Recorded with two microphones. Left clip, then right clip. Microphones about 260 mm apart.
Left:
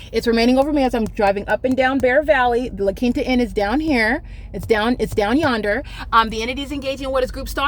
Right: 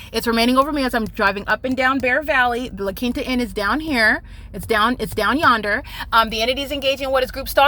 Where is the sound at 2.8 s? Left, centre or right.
Centre.